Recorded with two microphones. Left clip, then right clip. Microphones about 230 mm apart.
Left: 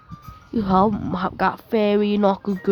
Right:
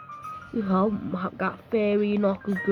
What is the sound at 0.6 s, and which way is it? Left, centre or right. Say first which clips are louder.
Speech: left 7 dB; left.